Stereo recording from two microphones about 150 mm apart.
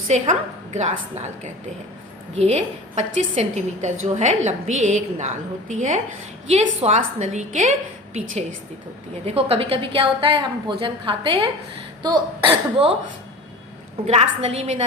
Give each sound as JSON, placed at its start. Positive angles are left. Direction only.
{"t": 0.1, "sound": "a woman's voice", "side_deg": -50}
{"t": 2.3, "sound": "a woman's voice", "side_deg": -45}
{"t": 9.2, "sound": "a woman's voice", "side_deg": -40}
{"t": 14.1, "sound": "a woman's voice", "side_deg": -45}